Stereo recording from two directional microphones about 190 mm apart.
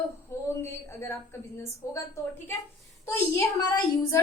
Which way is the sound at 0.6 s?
15° left (ahead or behind).